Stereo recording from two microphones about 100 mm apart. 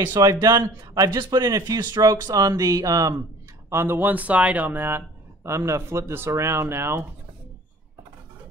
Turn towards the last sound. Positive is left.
turn(degrees=-25)  # may be behind; listen again after turning